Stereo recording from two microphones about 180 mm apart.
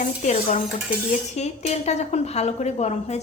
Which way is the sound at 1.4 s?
40° left (ahead or behind).